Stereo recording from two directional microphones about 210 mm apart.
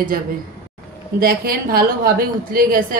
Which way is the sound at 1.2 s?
45° right (ahead or behind).